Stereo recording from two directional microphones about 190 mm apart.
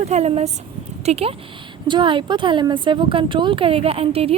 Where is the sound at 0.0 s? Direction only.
35° right (ahead or behind).